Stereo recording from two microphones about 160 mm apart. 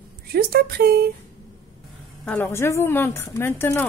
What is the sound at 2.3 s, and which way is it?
Speech, 15° left (ahead or behind).